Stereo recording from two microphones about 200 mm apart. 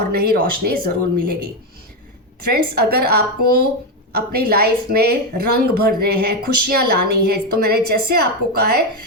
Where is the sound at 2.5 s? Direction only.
50° right (ahead or behind).